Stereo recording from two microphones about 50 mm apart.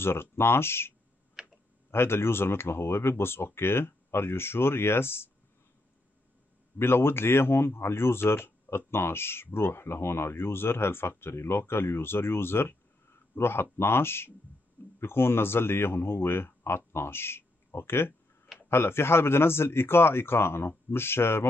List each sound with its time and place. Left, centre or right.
0.0 s speech: left
1.4 s tick-tock: centre
1.9 s speech: left
6.8 s speech: left